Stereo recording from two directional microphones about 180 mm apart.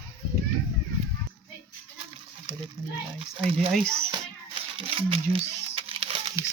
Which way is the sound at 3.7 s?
Centre (ahead or behind).